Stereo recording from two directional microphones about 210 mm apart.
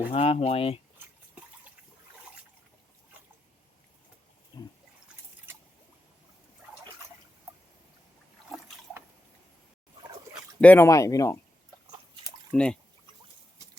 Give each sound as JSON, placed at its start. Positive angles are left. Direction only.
{"t": 0.1, "sound": "speech", "side_deg": 30}
{"t": 4.5, "sound": "a sound", "side_deg": 20}
{"t": 8.5, "sound": "liquid", "side_deg": 0}
{"t": 10.6, "sound": "speech", "side_deg": 10}
{"t": 12.5, "sound": "speech", "side_deg": 5}